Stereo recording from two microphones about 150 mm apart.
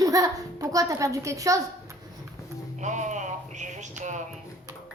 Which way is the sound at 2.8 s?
55° right (ahead or behind).